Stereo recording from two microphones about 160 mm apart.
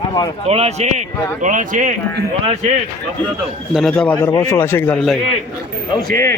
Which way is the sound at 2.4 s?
40° right (ahead or behind).